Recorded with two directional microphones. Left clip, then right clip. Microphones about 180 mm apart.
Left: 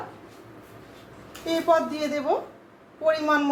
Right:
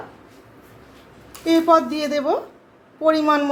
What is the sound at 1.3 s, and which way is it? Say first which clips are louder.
A woman's voice: right 6 dB; 50° right (ahead or behind).